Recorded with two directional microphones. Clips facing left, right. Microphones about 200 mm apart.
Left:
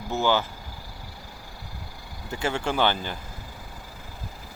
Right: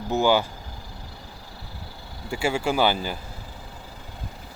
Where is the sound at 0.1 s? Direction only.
15° right (ahead or behind).